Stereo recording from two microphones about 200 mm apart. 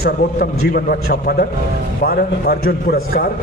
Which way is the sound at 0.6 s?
50° left (ahead or behind).